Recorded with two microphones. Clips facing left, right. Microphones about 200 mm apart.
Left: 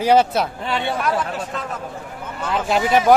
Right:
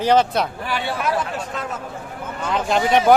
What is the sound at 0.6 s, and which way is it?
Speech, 25° left (ahead or behind).